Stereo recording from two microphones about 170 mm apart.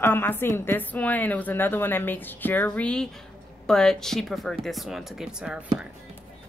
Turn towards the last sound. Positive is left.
turn(degrees=-5)  # may be behind; listen again after turning